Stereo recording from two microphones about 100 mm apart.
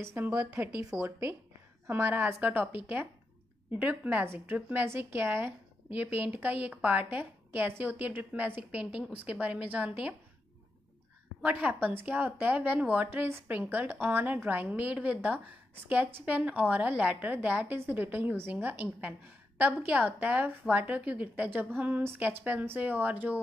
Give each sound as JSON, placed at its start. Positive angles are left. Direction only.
{"t": 0.0, "sound": "a woman's voice", "side_deg": -25}
{"t": 0.5, "sound": "a woman's voice", "side_deg": -10}
{"t": 1.9, "sound": "a woman's voice", "side_deg": -25}
{"t": 3.8, "sound": "a woman's voice", "side_deg": -15}
{"t": 11.4, "sound": "a woman's voice", "side_deg": -15}